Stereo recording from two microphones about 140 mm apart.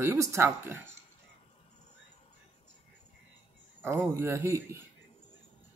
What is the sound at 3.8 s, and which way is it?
Speech, 15° right (ahead or behind).